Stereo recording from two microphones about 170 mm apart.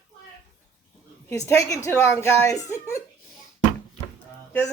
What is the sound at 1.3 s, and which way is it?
Speech, 15° left (ahead or behind).